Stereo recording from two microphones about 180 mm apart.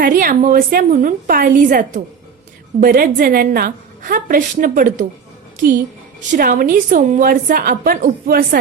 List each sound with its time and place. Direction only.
0.0 s a woman's voice: 50° right (ahead or behind)
6.1 s a woman's voice: 45° right (ahead or behind)